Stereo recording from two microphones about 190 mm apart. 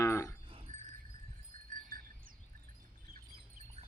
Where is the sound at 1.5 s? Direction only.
45° right (ahead or behind).